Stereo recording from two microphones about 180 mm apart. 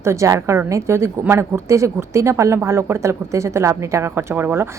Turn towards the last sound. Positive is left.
turn(degrees=-10)  # may be behind; listen again after turning